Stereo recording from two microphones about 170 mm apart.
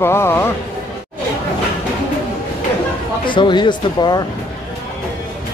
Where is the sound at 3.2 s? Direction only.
30° left (ahead or behind).